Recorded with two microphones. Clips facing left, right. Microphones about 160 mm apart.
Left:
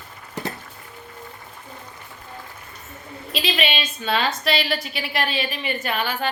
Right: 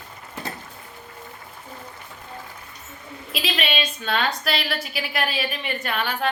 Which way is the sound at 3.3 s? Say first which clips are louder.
Left 2 dB; centre (ahead or behind).